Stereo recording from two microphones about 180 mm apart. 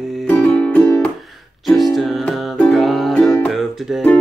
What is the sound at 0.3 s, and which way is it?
Music, 5° left (ahead or behind).